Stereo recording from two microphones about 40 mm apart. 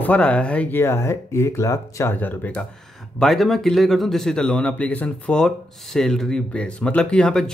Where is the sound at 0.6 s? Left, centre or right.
Left.